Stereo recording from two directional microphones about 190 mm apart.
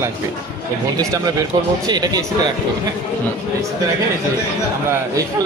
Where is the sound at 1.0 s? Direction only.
20° right (ahead or behind).